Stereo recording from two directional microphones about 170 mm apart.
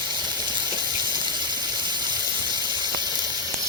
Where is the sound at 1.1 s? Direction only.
25° right (ahead or behind).